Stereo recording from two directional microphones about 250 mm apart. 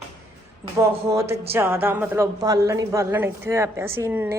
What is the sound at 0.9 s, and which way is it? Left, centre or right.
A woman's voice, centre.